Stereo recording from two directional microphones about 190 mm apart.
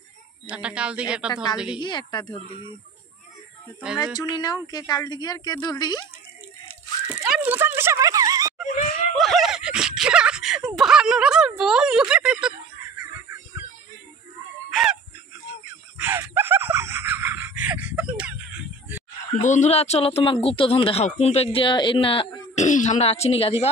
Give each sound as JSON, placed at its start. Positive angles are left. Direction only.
{"t": 0.5, "sound": "speech", "side_deg": -5}
{"t": 1.3, "sound": "speech", "side_deg": 20}
{"t": 4.4, "sound": "speech", "side_deg": 20}
{"t": 7.2, "sound": "a sound", "side_deg": -5}
{"t": 9.1, "sound": "groan", "side_deg": 0}
{"t": 10.8, "sound": "a sound", "side_deg": -5}
{"t": 14.7, "sound": "fowl", "side_deg": 0}
{"t": 16.0, "sound": "gasp", "side_deg": -10}
{"t": 19.4, "sound": "speech", "side_deg": 40}
{"t": 22.7, "sound": "speech", "side_deg": 40}